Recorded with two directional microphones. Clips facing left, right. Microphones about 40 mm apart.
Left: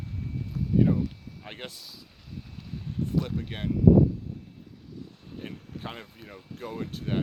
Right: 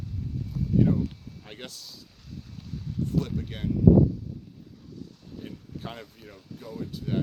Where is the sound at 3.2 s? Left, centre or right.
Left.